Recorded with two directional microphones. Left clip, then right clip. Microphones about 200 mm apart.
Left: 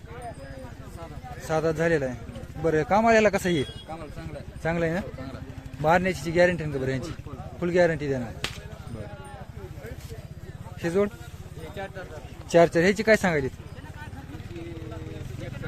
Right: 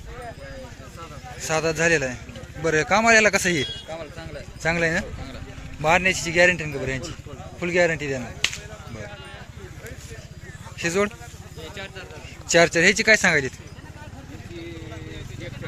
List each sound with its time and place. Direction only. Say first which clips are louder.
1.5 s speech: right 3 dB; 10° left (ahead or behind)
5.8 s speech: right 3 dB; 20° left (ahead or behind)
10.8 s speech: right 2 dB; 10° left (ahead or behind)
12.5 s speech: right 3 dB; 15° left (ahead or behind)